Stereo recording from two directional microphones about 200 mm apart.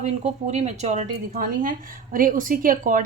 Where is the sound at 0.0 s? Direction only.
35° right (ahead or behind).